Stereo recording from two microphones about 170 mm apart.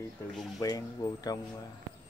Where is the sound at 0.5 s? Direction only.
20° left (ahead or behind).